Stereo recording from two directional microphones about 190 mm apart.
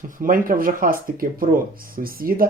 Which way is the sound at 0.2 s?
45° right (ahead or behind).